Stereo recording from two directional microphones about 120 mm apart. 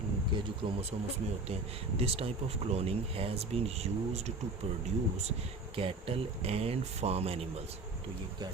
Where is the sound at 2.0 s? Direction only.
55° right (ahead or behind).